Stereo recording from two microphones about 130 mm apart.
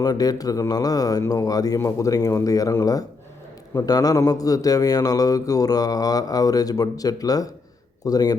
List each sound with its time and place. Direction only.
0.0 s a man's voice: 30° left (ahead or behind)